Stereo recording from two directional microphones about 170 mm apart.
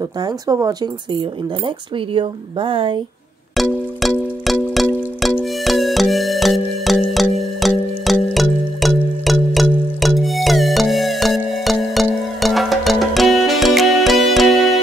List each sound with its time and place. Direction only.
0.5 s speech: 20° right (ahead or behind)
2.1 s speech: 30° right (ahead or behind)
3.5 s music: centre (ahead or behind)